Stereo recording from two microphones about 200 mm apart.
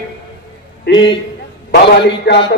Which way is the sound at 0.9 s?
55° left (ahead or behind).